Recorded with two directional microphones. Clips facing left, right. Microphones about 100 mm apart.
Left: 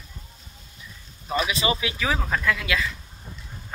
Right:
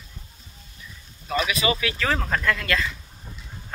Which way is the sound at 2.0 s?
5° left (ahead or behind).